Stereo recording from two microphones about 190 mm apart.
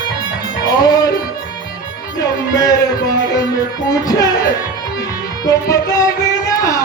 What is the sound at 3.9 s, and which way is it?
Music, 20° left (ahead or behind).